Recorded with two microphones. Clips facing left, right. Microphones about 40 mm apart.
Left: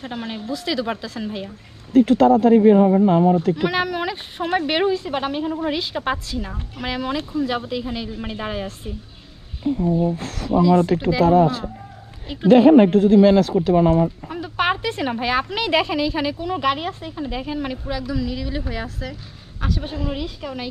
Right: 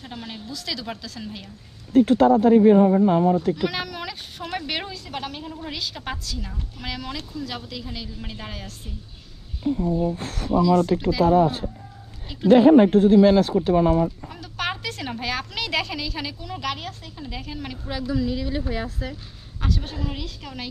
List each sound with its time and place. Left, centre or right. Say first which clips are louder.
0.0 s a woman's voice: left 7 dB; left
2.0 s speech: left 2 dB; left
3.5 s a woman's voice: left 6 dB; left
10.1 s speech: left 2 dB; left
10.6 s speech: left 3 dB; left
11.2 s speech: left 2 dB; left
14.3 s a woman's voice: left 8 dB; left
18.0 s speech: right 5 dB; left
19.6 s a woman's voice: left 3 dB; centre